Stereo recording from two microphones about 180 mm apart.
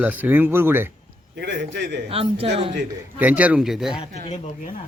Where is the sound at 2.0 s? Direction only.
30° right (ahead or behind).